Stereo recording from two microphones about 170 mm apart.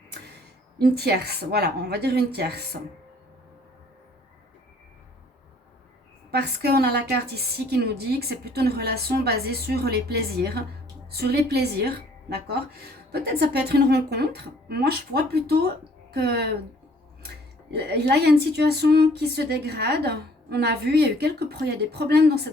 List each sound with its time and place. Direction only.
0.8 s speech: 70° right (ahead or behind)
6.3 s speech: 70° right (ahead or behind)
13.1 s speech: 70° right (ahead or behind)